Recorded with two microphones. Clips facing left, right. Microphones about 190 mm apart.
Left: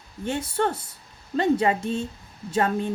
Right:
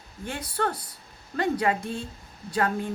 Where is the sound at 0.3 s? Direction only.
25° left (ahead or behind).